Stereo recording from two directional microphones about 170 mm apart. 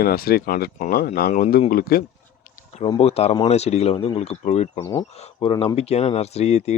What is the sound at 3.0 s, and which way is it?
Speech, 35° left (ahead or behind).